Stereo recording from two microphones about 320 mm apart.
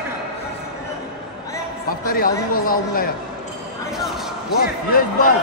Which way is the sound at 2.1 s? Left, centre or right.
Left.